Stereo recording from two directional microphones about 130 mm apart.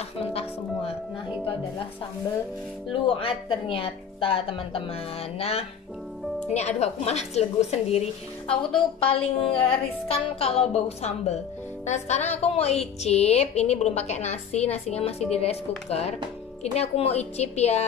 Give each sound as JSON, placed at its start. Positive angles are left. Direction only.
{"t": 0.3, "sound": "music", "side_deg": 50}
{"t": 2.9, "sound": "a woman's voice", "side_deg": 45}
{"t": 8.7, "sound": "a woman's voice", "side_deg": 45}